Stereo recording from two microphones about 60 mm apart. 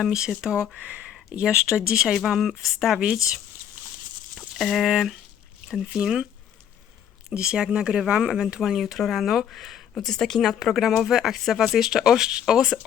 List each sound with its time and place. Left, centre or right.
0.0 s speech: centre
0.8 s speech: right
1.4 s speech: centre
4.4 s a sound: centre
4.9 s speech: centre
7.3 s speech: centre
8.8 s speech: centre